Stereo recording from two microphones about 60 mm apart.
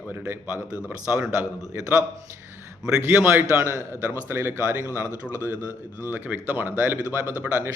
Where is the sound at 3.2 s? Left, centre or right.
Right.